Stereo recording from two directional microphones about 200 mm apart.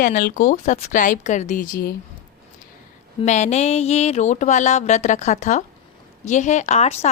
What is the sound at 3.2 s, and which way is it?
A woman's voice, 35° left (ahead or behind).